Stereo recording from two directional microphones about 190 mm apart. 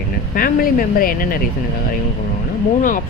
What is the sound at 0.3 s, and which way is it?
Speech, 50° left (ahead or behind).